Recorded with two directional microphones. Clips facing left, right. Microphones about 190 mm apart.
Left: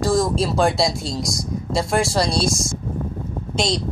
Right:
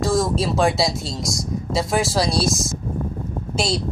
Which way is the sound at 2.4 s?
25° left (ahead or behind).